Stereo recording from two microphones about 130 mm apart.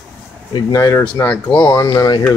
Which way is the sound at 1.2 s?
10° left (ahead or behind).